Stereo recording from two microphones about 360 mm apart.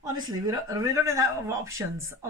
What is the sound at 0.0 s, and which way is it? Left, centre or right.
Speech, centre.